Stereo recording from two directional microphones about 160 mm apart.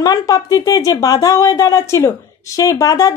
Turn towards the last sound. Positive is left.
turn(degrees=20)  # may be behind; listen again after turning